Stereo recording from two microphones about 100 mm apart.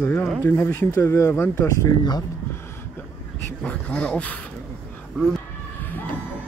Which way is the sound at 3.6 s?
10° left (ahead or behind).